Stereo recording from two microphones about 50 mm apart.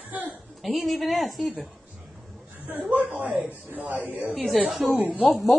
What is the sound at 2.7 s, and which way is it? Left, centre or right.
Speech, right.